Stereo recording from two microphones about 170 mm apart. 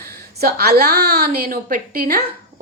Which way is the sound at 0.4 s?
70° right (ahead or behind).